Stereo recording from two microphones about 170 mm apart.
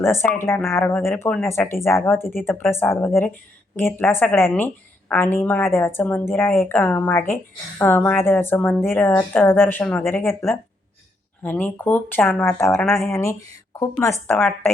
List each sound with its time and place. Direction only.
0.0 s a woman's voice: 15° left (ahead or behind)